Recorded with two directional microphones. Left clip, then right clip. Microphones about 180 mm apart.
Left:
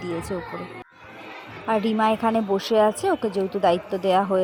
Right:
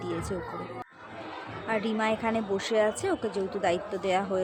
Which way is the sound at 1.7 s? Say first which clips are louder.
Left 7 dB; 30° left (ahead or behind).